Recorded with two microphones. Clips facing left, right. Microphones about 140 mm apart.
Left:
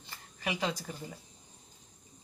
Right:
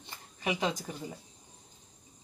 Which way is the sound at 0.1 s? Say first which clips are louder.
Right 3 dB; 20° right (ahead or behind).